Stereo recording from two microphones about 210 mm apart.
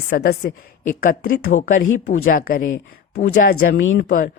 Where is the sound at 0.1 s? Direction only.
50° left (ahead or behind).